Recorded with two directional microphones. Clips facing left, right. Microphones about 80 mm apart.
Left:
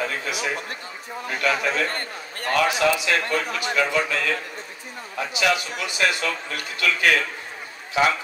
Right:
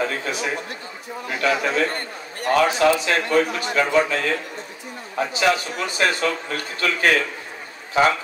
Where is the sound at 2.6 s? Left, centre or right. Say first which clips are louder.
Right 3 dB; right.